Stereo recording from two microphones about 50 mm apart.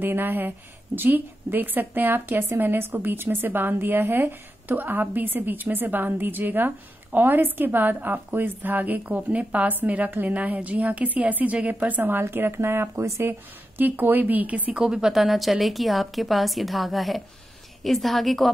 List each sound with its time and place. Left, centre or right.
0.0 s a woman's voice: right
12.0 s a woman's voice: right
12.5 s speech: right
13.2 s speech: right
14.7 s a woman's voice: centre
15.1 s a woman's voice: centre